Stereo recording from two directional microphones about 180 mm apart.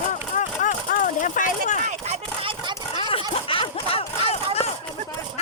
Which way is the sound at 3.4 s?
30° left (ahead or behind).